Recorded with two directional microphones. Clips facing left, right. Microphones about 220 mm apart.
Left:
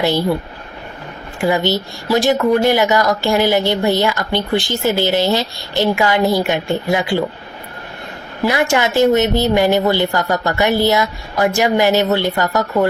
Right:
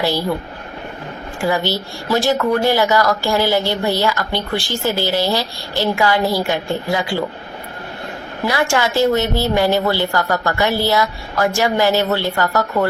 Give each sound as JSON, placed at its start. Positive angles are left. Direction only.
{"t": 1.4, "sound": "speech", "side_deg": 20}
{"t": 8.4, "sound": "speech", "side_deg": 20}